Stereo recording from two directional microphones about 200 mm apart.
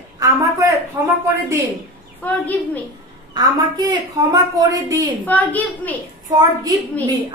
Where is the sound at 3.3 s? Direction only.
20° right (ahead or behind).